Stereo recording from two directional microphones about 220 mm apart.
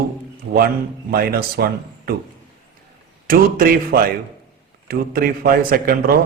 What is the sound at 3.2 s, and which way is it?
A man's voice, 40° right (ahead or behind).